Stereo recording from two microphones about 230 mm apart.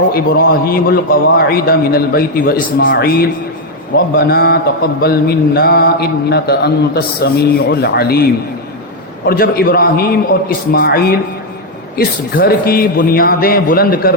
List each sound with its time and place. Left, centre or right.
0.1 s a man's voice: left
3.9 s mantra: left
9.2 s a man's voice: left
10.7 s mantra: left
11.9 s a man's voice: left